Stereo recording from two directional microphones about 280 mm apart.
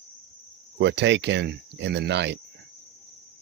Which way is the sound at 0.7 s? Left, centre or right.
Right.